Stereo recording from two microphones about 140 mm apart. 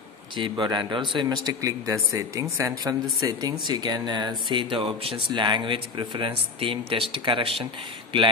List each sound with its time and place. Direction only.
0.4 s speech: 35° right (ahead or behind)